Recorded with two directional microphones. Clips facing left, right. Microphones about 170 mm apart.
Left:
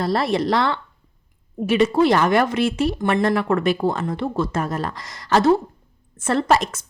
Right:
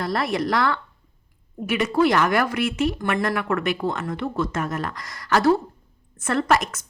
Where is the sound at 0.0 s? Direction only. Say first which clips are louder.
Left 4 dB; 30° left (ahead or behind).